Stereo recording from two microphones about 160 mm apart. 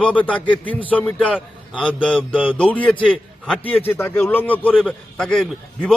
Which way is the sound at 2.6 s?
10° left (ahead or behind).